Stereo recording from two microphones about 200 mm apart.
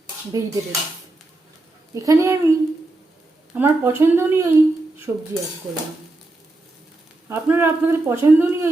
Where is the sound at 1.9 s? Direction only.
15° right (ahead or behind).